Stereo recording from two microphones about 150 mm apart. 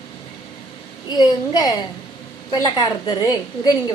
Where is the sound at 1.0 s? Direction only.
25° left (ahead or behind).